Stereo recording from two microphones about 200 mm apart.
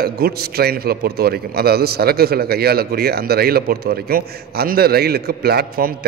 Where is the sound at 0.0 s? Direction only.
50° right (ahead or behind).